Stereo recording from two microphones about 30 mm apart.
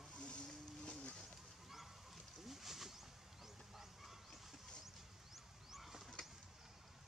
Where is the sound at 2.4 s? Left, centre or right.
Centre.